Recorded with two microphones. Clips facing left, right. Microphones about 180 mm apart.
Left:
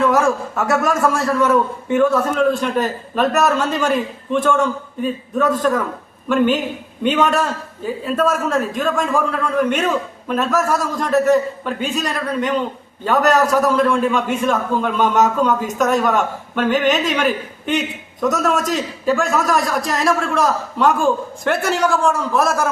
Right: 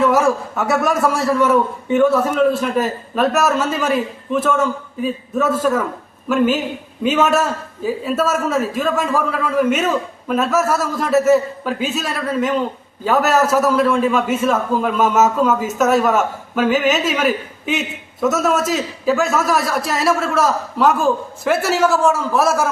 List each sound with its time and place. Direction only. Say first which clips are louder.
0.0 s a man's voice: right 1 dB; centre (ahead or behind)